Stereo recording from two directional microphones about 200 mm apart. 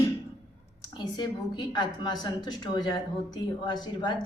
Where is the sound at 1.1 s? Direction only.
20° left (ahead or behind).